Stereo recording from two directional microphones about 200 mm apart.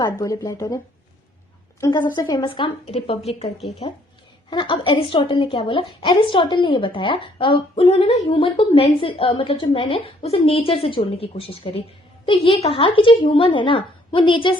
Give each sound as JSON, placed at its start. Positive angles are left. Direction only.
{"t": 0.0, "sound": "speech", "side_deg": 20}
{"t": 1.8, "sound": "a woman's voice", "side_deg": 20}